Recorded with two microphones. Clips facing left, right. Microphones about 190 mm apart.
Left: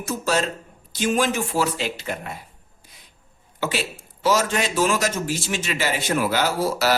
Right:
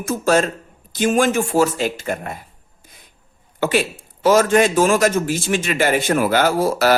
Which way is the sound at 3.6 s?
55° right (ahead or behind).